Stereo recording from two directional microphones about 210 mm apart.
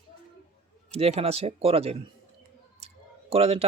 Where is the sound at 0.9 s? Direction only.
30° right (ahead or behind).